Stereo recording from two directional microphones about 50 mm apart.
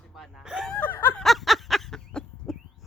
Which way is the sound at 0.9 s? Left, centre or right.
Left.